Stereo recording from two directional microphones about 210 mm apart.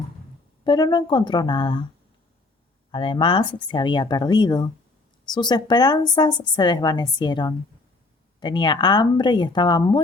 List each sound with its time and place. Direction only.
0.6 s a woman's voice: 20° left (ahead or behind)
2.9 s a woman's voice: 25° left (ahead or behind)